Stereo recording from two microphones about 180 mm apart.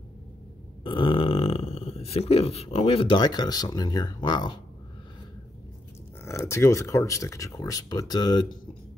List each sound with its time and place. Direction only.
0.8 s speech: 30° left (ahead or behind)
6.2 s speech: 15° left (ahead or behind)